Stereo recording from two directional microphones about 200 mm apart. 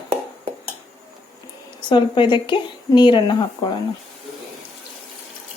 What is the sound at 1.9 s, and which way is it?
Speech, 25° left (ahead or behind).